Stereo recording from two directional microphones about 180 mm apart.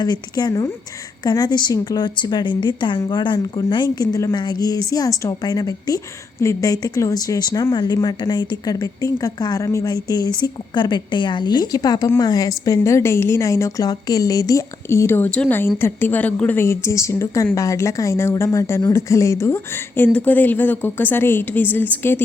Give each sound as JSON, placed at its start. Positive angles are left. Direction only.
{"t": 0.0, "sound": "a woman's voice", "side_deg": 20}